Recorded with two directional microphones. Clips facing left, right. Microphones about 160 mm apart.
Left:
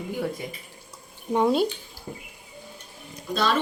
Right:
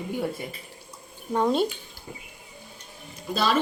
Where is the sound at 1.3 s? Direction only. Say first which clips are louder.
Left 2 dB; 5° left (ahead or behind).